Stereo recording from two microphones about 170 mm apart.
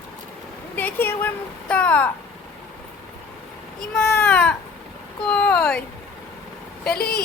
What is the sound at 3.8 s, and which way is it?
A child's voice, 5° left (ahead or behind).